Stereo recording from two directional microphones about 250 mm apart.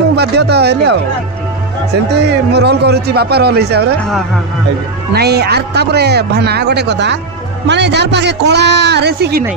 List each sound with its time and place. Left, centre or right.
0.1 s a man's voice: right
2.1 s a man's voice: right
5.1 s a man's voice: right